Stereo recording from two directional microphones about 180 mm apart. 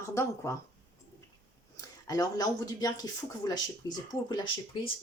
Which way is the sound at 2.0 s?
20° left (ahead or behind).